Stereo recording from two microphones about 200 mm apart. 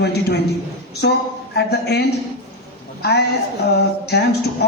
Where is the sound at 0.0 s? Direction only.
55° left (ahead or behind).